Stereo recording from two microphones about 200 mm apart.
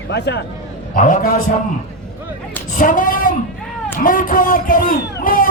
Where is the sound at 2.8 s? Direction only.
40° left (ahead or behind).